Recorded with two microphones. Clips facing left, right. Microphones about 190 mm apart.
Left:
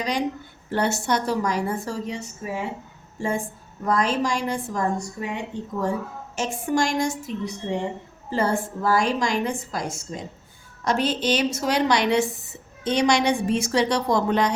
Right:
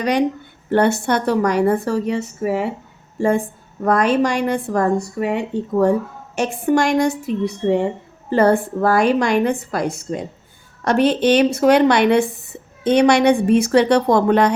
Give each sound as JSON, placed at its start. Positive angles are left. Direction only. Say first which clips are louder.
{"t": 0.0, "sound": "a woman's voice", "louder": "right 7 dB", "side_deg": -60}